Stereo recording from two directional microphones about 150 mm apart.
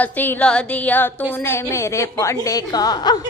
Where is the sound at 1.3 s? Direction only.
15° left (ahead or behind).